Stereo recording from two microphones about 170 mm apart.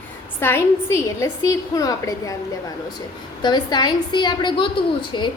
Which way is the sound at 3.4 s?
25° left (ahead or behind).